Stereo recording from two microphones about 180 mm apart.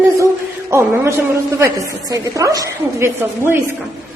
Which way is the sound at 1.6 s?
20° right (ahead or behind).